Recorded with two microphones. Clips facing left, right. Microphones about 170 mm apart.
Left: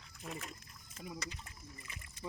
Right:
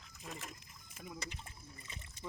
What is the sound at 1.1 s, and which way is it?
Speech, 25° right (ahead or behind).